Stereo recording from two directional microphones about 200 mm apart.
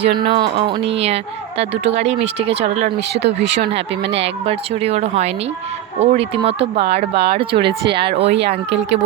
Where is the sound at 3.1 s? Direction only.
55° right (ahead or behind).